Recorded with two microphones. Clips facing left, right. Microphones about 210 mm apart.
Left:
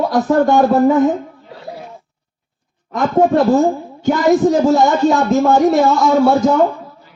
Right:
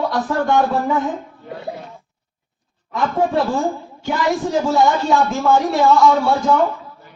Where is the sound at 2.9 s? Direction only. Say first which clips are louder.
Left 5 dB; 40° left (ahead or behind).